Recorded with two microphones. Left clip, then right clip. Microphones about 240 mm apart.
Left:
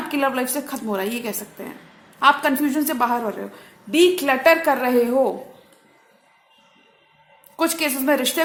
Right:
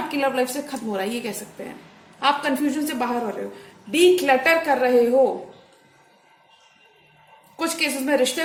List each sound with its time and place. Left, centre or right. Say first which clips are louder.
0.1 s a woman's voice: left 2 dB; left
7.6 s a woman's voice: left 2 dB; left